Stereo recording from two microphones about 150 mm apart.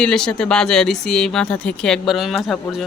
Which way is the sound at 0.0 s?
5° left (ahead or behind).